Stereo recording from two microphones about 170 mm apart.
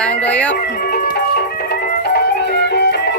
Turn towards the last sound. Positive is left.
turn(degrees=80)